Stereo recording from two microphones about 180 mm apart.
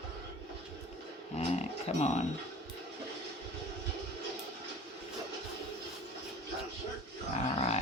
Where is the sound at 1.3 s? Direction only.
35° left (ahead or behind).